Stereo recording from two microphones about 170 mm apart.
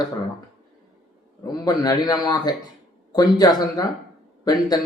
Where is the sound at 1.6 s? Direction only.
20° left (ahead or behind).